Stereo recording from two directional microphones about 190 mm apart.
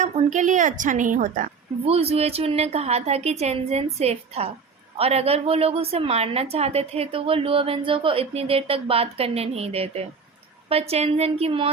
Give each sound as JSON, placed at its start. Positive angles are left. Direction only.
{"t": 0.0, "sound": "a woman's voice", "side_deg": -40}